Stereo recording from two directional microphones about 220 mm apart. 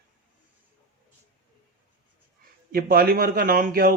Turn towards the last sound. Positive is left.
turn(degrees=-40)  # may be behind; listen again after turning